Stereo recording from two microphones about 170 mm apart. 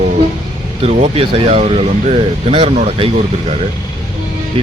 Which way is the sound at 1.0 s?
30° right (ahead or behind).